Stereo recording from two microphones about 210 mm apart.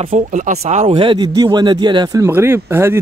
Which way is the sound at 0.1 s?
35° right (ahead or behind).